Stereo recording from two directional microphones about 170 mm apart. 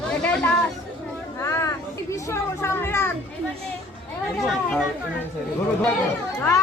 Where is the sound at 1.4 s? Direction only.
15° left (ahead or behind).